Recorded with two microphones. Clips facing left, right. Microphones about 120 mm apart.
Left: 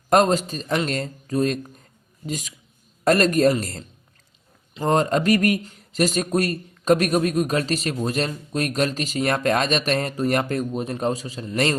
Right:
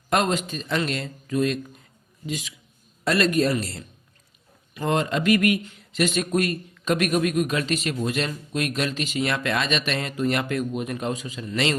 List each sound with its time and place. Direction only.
0.1 s a man's voice: 40° left (ahead or behind)
4.9 s speech: 40° left (ahead or behind)